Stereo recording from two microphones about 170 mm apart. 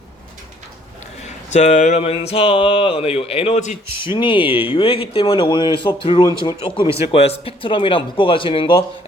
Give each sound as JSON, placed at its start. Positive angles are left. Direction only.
{"t": 1.5, "sound": "speech", "side_deg": 45}
{"t": 3.9, "sound": "speech", "side_deg": 30}